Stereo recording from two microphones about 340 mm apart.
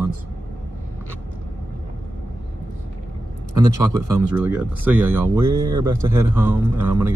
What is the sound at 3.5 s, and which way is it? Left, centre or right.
Speech, centre.